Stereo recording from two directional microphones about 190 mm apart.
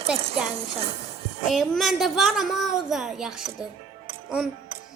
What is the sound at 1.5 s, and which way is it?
A woman's voice, centre (ahead or behind).